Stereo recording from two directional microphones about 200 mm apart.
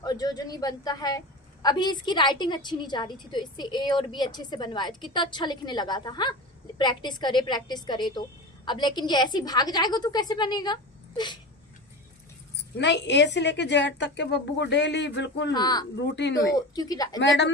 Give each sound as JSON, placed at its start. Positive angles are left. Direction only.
{"t": 0.0, "sound": "a woman's voice", "side_deg": 20}
{"t": 12.8, "sound": "a woman's voice", "side_deg": 60}
{"t": 15.5, "sound": "a woman's voice", "side_deg": 20}
{"t": 16.0, "sound": "a woman's voice", "side_deg": 60}
{"t": 16.3, "sound": "a woman's voice", "side_deg": 20}
{"t": 17.2, "sound": "a woman's voice", "side_deg": 60}